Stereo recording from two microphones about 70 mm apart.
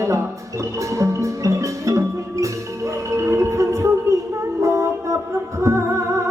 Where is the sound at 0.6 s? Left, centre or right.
Right.